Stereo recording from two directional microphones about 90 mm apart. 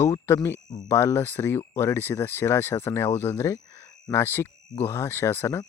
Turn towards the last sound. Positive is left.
turn(degrees=25)  # may be behind; listen again after turning